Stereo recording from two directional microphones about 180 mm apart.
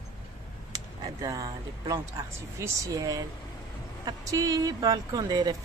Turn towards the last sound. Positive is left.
turn(degrees=-25)  # may be behind; listen again after turning